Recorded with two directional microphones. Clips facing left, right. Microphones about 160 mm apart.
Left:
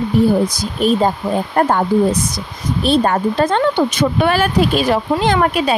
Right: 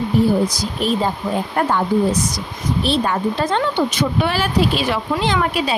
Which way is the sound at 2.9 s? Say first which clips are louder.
Left 6 dB; 50° left (ahead or behind).